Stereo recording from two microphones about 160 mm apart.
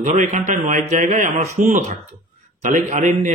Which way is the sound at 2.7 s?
50° right (ahead or behind).